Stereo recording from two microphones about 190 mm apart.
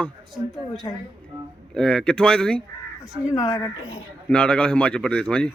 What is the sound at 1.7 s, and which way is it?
Speech, 5° left (ahead or behind).